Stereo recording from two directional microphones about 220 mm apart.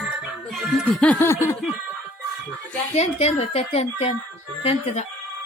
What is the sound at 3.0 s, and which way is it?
A woman's voice, 30° left (ahead or behind).